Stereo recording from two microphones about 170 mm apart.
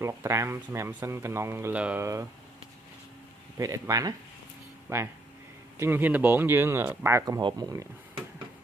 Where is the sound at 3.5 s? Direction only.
20° right (ahead or behind).